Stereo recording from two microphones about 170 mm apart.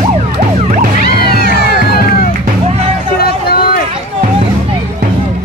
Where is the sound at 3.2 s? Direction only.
65° left (ahead or behind).